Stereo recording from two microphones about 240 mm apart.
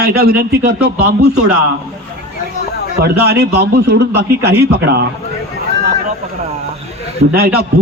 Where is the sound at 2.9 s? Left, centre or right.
Right.